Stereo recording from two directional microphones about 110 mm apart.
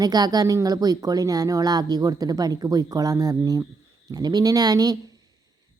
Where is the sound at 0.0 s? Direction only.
35° right (ahead or behind).